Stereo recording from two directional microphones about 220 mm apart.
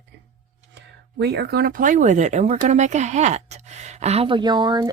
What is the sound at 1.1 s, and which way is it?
Speech, 50° right (ahead or behind).